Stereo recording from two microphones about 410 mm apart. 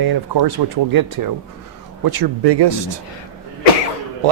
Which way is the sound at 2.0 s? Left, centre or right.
Right.